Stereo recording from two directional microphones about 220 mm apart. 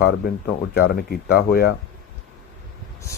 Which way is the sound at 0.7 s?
45° left (ahead or behind).